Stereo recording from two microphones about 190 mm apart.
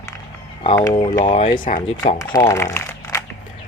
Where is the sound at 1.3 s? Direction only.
45° left (ahead or behind).